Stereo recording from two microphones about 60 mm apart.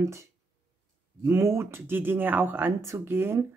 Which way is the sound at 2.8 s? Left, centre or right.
Right.